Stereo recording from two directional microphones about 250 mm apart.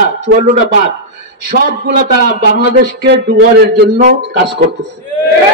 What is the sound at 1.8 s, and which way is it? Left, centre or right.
A man's voice, right.